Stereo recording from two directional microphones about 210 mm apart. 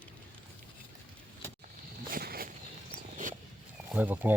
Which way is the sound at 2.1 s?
45° right (ahead or behind).